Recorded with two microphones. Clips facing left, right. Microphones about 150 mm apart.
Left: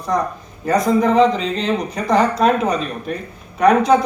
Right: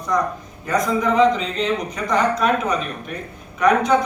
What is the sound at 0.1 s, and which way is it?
A man's voice, 30° left (ahead or behind).